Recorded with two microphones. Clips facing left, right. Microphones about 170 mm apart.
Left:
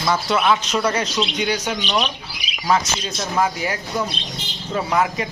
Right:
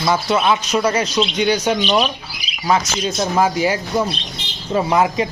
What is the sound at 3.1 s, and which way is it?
Speech, 25° right (ahead or behind).